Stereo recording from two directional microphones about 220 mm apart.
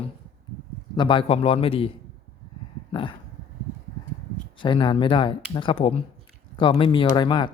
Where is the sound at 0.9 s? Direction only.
20° left (ahead or behind).